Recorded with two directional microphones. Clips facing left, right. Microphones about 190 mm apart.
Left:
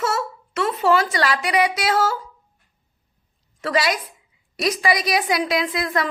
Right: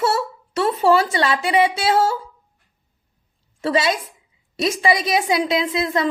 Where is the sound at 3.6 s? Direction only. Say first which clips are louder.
Right 2 dB; 25° right (ahead or behind).